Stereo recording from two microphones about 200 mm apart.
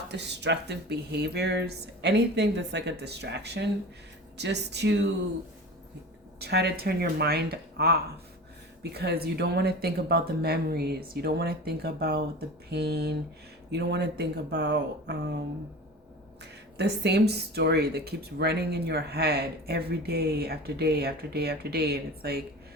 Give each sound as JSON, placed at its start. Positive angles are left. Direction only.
{"t": 0.1, "sound": "speech", "side_deg": -60}
{"t": 6.4, "sound": "speech", "side_deg": -55}
{"t": 16.4, "sound": "speech", "side_deg": -55}